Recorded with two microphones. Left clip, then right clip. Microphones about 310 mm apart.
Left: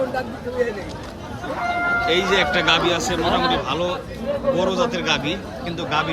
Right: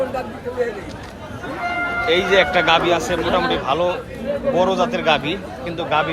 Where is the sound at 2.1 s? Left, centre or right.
Centre.